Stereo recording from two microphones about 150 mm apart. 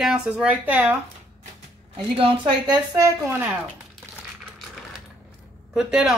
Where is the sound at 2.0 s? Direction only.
35° right (ahead or behind); by 3.4 s 20° right (ahead or behind).